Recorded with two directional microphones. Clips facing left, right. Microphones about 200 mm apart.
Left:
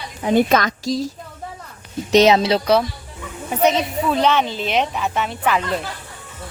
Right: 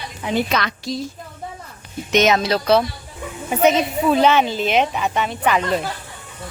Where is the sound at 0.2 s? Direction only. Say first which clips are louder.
Left 5 dB; 45° left (ahead or behind).